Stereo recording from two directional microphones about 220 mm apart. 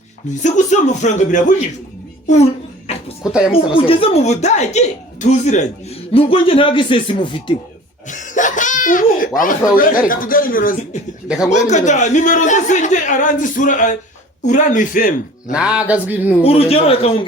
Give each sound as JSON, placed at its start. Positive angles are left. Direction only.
{"t": 0.4, "sound": "a man's voice", "side_deg": 35}
{"t": 2.2, "sound": "a sound", "side_deg": 30}
{"t": 3.5, "sound": "speech", "side_deg": 25}
{"t": 8.0, "sound": "a child's voice", "side_deg": 35}
{"t": 15.5, "sound": "speech", "side_deg": -5}
{"t": 16.4, "sound": "speech", "side_deg": 25}